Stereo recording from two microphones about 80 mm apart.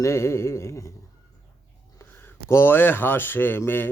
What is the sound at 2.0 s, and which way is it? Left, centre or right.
Speech, left.